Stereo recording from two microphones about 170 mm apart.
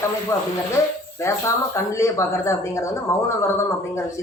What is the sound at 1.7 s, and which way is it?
Speech, 15° left (ahead or behind).